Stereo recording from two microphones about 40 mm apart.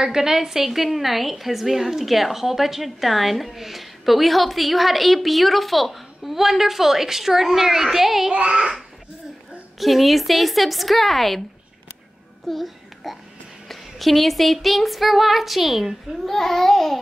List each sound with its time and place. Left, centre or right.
0.0 s a woman's voice: centre
8.3 s a child's voice: right
9.8 s a woman's voice: centre
12.4 s babbling: centre
13.7 s a woman's voice: centre